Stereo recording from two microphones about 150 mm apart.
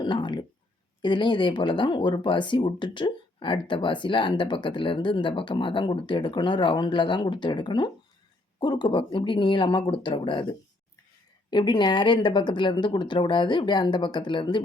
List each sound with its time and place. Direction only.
0.0 s a sound: 30° left (ahead or behind)
1.0 s speech: 30° left (ahead or behind)
11.5 s speech: 30° left (ahead or behind)